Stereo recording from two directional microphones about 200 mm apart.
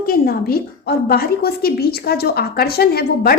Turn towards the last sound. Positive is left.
turn(degrees=50)  # may be behind; listen again after turning